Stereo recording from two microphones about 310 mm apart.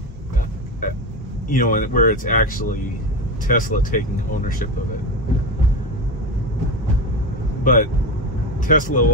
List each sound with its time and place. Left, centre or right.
1.5 s speech: left
7.6 s speech: left